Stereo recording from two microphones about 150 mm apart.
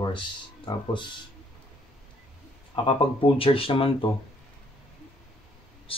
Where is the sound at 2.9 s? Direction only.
35° left (ahead or behind).